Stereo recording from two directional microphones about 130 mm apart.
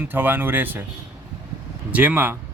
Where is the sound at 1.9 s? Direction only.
10° right (ahead or behind).